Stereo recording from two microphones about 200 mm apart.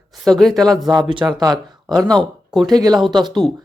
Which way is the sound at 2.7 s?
20° right (ahead or behind).